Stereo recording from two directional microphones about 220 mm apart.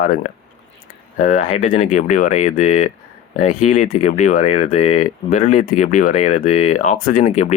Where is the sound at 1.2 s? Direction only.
35° left (ahead or behind).